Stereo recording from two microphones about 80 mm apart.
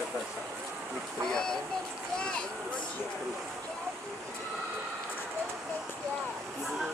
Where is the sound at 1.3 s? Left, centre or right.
Centre.